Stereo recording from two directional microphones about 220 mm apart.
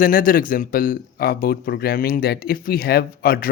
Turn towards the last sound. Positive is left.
turn(degrees=45)  # may be behind; listen again after turning